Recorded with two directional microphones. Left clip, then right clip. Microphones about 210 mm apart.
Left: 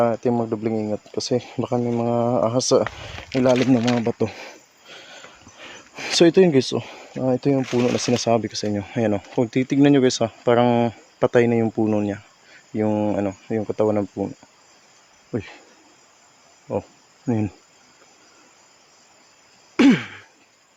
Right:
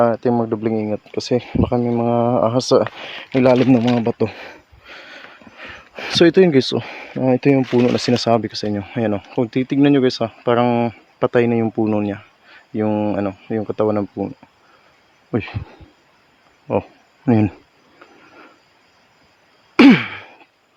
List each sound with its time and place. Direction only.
0.0 s speech: 20° right (ahead or behind)
4.0 s a sound: 15° right (ahead or behind)
5.9 s speech: 10° right (ahead or behind)
15.3 s speech: 35° right (ahead or behind)
17.2 s speech: 25° right (ahead or behind)
19.7 s sigh: 30° right (ahead or behind)